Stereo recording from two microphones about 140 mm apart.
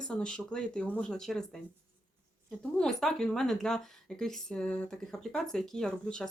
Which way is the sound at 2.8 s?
5° left (ahead or behind).